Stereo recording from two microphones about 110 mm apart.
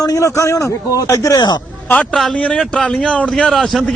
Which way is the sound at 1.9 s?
10° left (ahead or behind).